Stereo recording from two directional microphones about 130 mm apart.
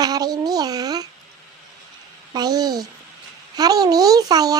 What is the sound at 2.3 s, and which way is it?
Speech, 30° right (ahead or behind).